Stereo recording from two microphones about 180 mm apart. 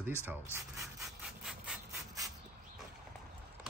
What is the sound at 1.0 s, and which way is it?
Rub, 5° right (ahead or behind).